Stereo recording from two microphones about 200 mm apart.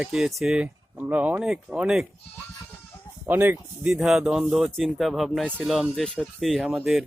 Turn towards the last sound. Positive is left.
turn(degrees=0)  # may be behind; listen again after turning